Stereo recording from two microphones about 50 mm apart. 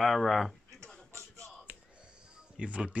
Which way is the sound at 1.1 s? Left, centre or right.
Right.